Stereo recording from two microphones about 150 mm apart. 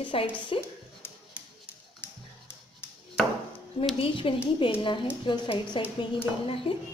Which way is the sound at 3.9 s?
35° left (ahead or behind).